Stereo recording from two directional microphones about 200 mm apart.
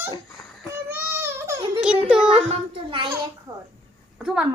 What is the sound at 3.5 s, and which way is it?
Speech, 15° right (ahead or behind).